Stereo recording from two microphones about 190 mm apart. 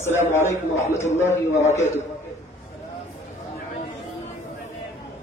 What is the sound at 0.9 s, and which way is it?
Speech, 35° left (ahead or behind).